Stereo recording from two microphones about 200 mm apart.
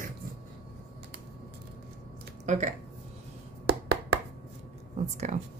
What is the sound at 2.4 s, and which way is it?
Speech, 35° right (ahead or behind).